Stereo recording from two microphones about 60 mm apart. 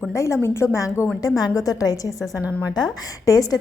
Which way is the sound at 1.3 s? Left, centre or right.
Left.